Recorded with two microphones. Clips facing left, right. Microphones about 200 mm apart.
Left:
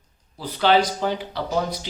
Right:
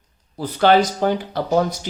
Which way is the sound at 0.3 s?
50° right (ahead or behind).